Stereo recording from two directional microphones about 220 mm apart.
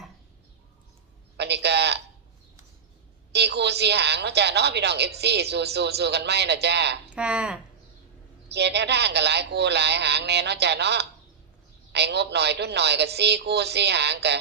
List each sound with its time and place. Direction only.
1.4 s a sound: 50° right (ahead or behind)
3.3 s a woman's voice: 50° right (ahead or behind)
7.1 s speech: 5° right (ahead or behind)
8.4 s a woman's voice: 50° right (ahead or behind)